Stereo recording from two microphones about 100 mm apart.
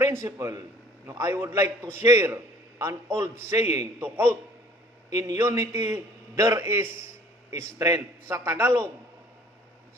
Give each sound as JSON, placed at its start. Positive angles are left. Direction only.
{"t": 0.0, "sound": "a man's voice", "side_deg": -25}
{"t": 5.1, "sound": "a man's voice", "side_deg": -35}